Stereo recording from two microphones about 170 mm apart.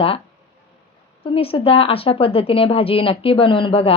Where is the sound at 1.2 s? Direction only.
35° left (ahead or behind).